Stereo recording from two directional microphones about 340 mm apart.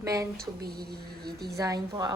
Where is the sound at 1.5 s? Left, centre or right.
Centre.